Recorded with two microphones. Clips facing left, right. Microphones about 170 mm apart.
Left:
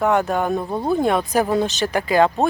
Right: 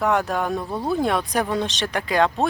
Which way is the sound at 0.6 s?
20° left (ahead or behind).